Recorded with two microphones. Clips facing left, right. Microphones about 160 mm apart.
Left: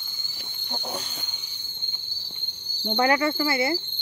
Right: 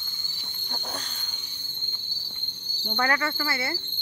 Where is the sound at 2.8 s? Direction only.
15° left (ahead or behind).